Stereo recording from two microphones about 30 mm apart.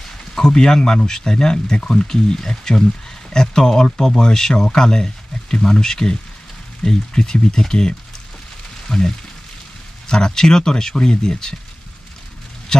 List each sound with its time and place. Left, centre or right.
0.0 s speech: centre